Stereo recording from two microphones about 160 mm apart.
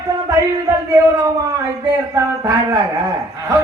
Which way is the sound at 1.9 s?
20° right (ahead or behind).